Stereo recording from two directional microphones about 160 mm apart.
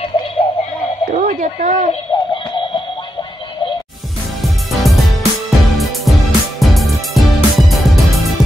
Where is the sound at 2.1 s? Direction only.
25° left (ahead or behind).